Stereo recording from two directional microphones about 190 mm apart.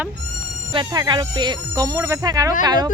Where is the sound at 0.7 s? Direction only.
20° right (ahead or behind).